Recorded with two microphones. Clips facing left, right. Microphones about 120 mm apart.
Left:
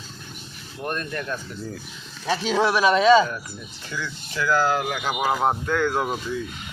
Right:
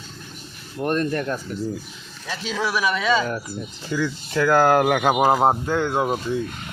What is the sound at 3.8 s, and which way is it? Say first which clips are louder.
Speech: right 8 dB; 40° right (ahead or behind).